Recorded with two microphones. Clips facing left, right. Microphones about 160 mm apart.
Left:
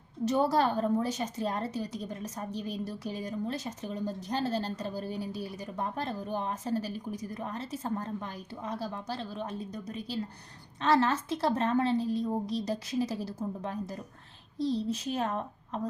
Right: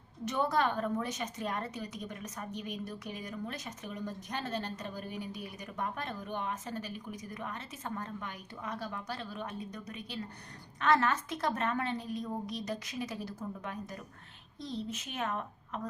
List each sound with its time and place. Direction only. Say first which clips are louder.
0.3 s a woman's voice: left 4 dB; 30° left (ahead or behind)